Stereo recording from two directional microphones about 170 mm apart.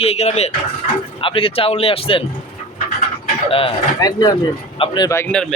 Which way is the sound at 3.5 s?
35° left (ahead or behind).